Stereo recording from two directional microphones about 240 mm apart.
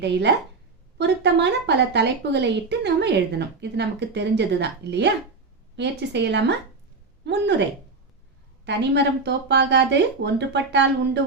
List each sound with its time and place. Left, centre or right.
0.0 s a woman's voice: right
8.6 s speech: right